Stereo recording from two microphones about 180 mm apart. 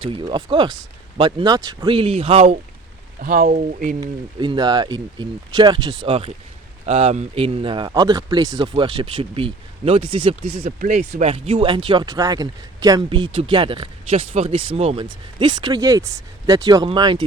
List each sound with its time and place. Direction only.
0.0 s speech: 25° right (ahead or behind)
3.2 s speech: 50° right (ahead or behind)
4.0 s speech: 25° right (ahead or behind)
10.8 s speech: 45° right (ahead or behind)
11.2 s speech: 35° right (ahead or behind)